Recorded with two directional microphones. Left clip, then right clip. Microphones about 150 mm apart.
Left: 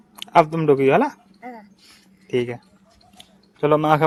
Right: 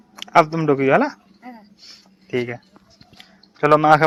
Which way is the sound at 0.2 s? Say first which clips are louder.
Right 1 dB; 20° left (ahead or behind).